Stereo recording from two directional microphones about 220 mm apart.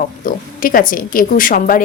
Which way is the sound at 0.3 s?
40° left (ahead or behind).